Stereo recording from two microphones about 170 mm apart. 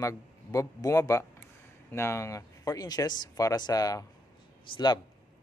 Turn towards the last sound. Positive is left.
turn(degrees=25)  # may be behind; listen again after turning